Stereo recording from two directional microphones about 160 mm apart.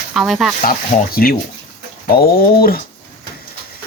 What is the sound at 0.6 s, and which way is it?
Speech, 65° left (ahead or behind).